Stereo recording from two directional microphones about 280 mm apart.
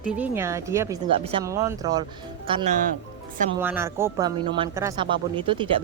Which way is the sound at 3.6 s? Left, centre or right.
Centre.